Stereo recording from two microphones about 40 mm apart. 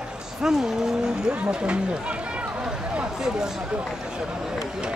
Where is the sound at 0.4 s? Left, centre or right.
Centre.